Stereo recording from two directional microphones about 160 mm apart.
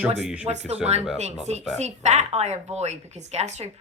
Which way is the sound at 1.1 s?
45° right (ahead or behind).